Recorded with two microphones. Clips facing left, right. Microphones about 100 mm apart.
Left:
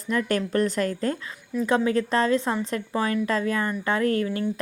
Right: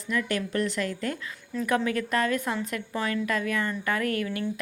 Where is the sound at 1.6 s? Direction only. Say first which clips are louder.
Left 4 dB; 25° left (ahead or behind).